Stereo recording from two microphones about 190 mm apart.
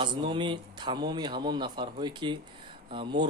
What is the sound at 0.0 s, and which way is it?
Speech, 25° right (ahead or behind).